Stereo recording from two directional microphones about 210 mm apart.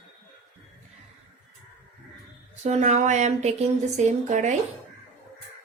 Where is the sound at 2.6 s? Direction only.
35° right (ahead or behind).